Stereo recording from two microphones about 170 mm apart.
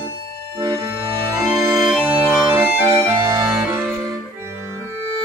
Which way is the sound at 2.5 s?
20° right (ahead or behind).